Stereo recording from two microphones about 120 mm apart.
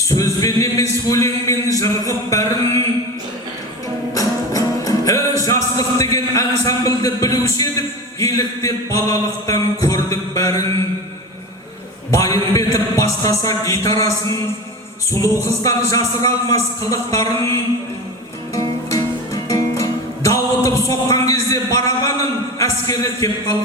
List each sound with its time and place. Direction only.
0.1 s a sound: 30° left (ahead or behind)
4.1 s music: 30° left (ahead or behind)
12.1 s a man's voice: 30° left (ahead or behind)
18.5 s music: 25° left (ahead or behind)